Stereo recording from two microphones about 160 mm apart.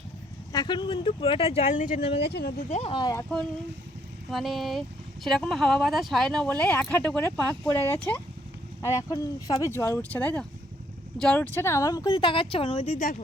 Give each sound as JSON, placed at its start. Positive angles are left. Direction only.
{"t": 0.5, "sound": "speech", "side_deg": 25}
{"t": 1.7, "sound": "speech", "side_deg": 55}
{"t": 2.0, "sound": "speech", "side_deg": 35}
{"t": 2.2, "sound": "speech", "side_deg": 80}
{"t": 2.6, "sound": "speech", "side_deg": 45}
{"t": 2.9, "sound": "speech", "side_deg": 25}
{"t": 4.3, "sound": "speech", "side_deg": 0}
{"t": 8.8, "sound": "speech", "side_deg": 20}
{"t": 13.0, "sound": "speech", "side_deg": 55}